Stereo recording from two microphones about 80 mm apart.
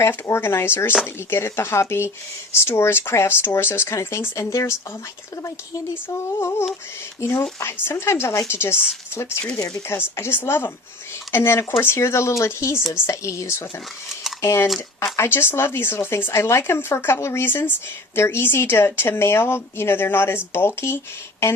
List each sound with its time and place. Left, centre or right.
0.0 s speech: left
6.1 s speech: left
9.6 s speech: left
10.2 s speech: left